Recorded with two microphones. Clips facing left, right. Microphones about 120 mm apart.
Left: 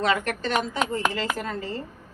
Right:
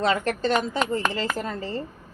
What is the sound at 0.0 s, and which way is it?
A woman's voice, 30° right (ahead or behind).